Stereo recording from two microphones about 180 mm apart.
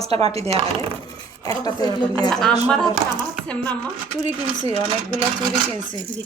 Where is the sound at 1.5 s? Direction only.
20° left (ahead or behind).